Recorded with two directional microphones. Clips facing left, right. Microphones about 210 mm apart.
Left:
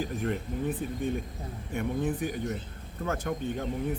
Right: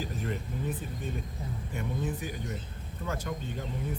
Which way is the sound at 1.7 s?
55° left (ahead or behind).